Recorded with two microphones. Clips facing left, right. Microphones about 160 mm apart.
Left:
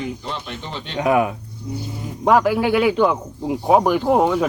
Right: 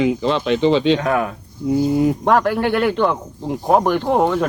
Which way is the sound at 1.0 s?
15° left (ahead or behind).